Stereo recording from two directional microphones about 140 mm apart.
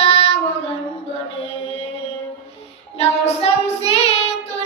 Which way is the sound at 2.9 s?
45° left (ahead or behind).